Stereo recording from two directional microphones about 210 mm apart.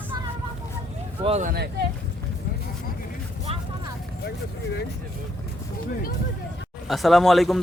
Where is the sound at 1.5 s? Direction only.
50° right (ahead or behind).